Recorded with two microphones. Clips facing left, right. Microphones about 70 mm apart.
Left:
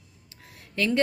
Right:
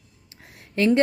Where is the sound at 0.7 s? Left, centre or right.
Right.